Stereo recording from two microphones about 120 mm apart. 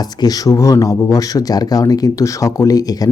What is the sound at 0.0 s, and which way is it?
Speech, 35° left (ahead or behind).